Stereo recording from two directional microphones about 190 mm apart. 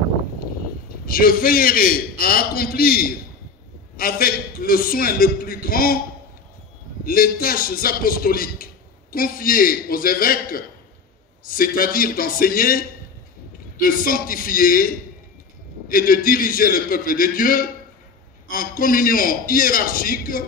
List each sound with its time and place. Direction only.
1.0 s a man's voice: 50° left (ahead or behind)
7.1 s a man's voice: 50° left (ahead or behind)
15.9 s a man's voice: 50° left (ahead or behind)